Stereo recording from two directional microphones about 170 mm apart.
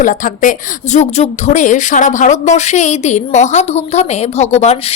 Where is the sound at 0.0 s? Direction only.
50° left (ahead or behind).